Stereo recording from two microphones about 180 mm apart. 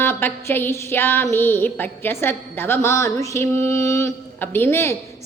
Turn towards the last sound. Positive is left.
turn(degrees=15)  # may be behind; listen again after turning